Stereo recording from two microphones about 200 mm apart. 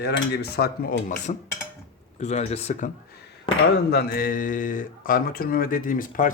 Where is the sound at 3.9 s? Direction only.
50° left (ahead or behind).